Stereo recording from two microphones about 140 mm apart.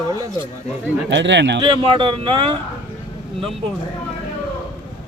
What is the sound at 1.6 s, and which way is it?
Speech, 40° right (ahead or behind).